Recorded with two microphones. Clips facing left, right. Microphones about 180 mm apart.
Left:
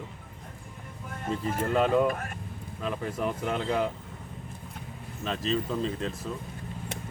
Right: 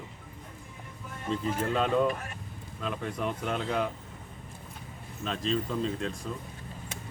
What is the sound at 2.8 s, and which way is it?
Speech, 5° left (ahead or behind).